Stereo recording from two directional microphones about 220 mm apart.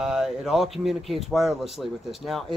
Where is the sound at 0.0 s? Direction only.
5° right (ahead or behind).